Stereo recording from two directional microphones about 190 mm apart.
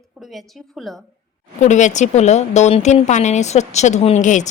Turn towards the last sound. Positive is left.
turn(degrees=40)  # may be behind; listen again after turning